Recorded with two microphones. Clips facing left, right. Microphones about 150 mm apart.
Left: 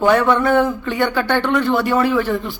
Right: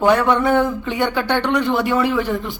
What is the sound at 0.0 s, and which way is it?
A man's voice, 15° right (ahead or behind).